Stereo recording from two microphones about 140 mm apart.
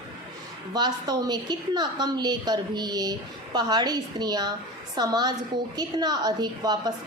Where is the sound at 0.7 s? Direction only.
30° right (ahead or behind).